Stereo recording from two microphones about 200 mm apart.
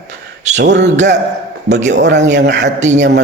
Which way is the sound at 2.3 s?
60° right (ahead or behind).